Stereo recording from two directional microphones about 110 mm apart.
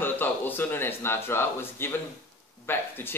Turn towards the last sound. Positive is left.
turn(degrees=20)  # may be behind; listen again after turning